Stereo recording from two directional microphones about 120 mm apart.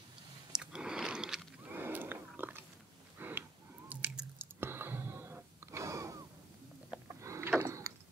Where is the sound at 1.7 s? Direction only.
15° right (ahead or behind).